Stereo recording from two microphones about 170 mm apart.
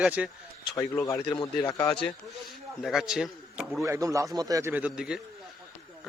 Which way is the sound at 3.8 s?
20° right (ahead or behind).